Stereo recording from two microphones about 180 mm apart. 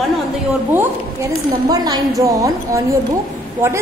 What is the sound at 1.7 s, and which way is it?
A woman's voice, 20° right (ahead or behind).